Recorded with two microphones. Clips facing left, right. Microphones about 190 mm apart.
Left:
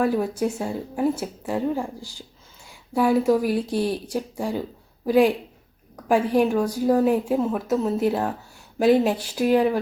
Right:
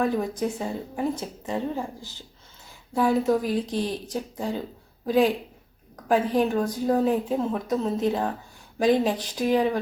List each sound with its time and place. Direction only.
0.0 s a woman's voice: 5° left (ahead or behind)